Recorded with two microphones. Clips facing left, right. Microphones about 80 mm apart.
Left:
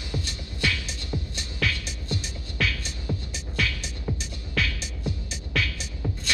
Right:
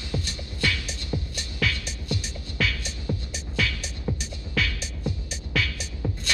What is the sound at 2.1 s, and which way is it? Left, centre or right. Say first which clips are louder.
Music: right 1 dB; left.